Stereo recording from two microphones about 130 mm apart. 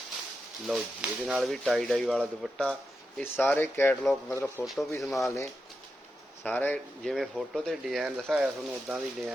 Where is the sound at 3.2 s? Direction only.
15° left (ahead or behind).